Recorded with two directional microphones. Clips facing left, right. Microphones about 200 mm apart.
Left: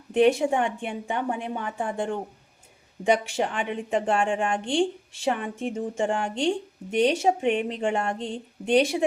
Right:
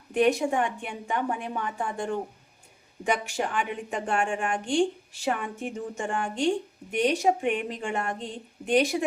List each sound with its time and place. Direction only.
0.1 s a woman's voice: 25° left (ahead or behind)
3.3 s a woman's voice: 25° left (ahead or behind)